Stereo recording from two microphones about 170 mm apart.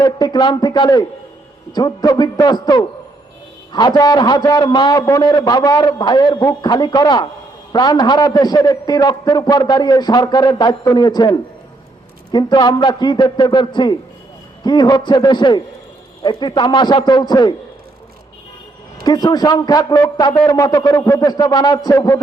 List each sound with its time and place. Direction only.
0.0 s a man's voice: 25° left (ahead or behind)
19.0 s a man's voice: 25° left (ahead or behind)